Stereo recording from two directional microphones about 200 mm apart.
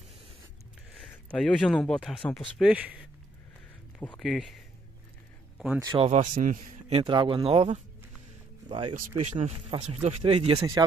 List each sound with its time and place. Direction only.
0.9 s speech: 5° left (ahead or behind)
4.2 s speech: centre (ahead or behind)
5.8 s speech: 25° right (ahead or behind)
10.8 s speech: 20° right (ahead or behind)